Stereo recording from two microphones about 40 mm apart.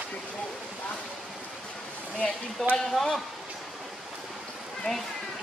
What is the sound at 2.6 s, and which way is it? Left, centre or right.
Speech, centre.